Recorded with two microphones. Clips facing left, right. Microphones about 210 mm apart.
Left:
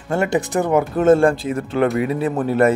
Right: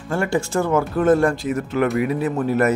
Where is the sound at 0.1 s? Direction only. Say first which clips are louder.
Left 2 dB; 20° left (ahead or behind).